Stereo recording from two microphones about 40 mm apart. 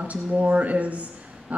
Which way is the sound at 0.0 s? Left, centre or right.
Right.